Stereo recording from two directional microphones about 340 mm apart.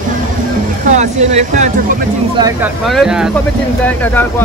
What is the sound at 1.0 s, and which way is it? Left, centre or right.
Speech, right.